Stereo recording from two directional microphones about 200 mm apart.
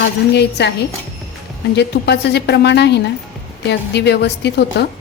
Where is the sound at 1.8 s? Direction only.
55° left (ahead or behind).